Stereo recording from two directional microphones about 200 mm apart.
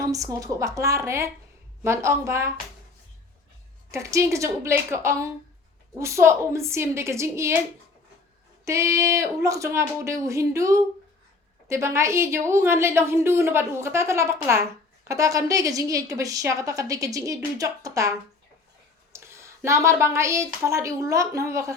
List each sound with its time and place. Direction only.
0.0 s a woman's voice: 15° right (ahead or behind)
3.9 s a woman's voice: 15° right (ahead or behind)
8.6 s a woman's voice: 15° right (ahead or behind)
19.1 s speech: 15° right (ahead or behind)